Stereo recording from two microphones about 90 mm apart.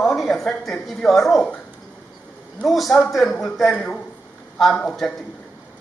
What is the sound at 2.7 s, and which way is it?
A woman's voice, centre (ahead or behind).